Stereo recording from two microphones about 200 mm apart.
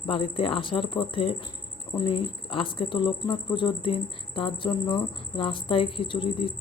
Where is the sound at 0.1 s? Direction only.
25° left (ahead or behind).